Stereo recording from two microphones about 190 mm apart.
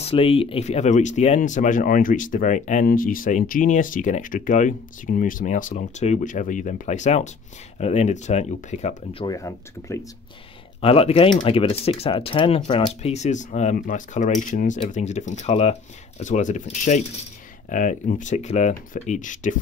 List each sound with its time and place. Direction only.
0.0 s speech: 30° left (ahead or behind)
9.2 s speech: 15° left (ahead or behind)
10.8 s speech: 30° left (ahead or behind)